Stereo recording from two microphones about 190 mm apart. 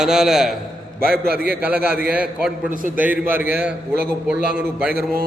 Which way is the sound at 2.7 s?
45° right (ahead or behind).